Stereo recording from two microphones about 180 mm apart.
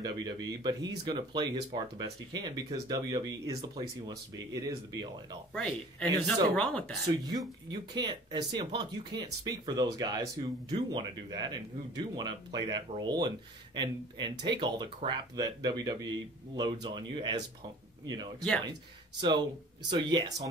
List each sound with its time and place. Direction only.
0.0 s speech: 20° right (ahead or behind)
5.5 s speech: 5° left (ahead or behind)
7.2 s speech: 20° right (ahead or behind)
19.9 s speech: 25° right (ahead or behind)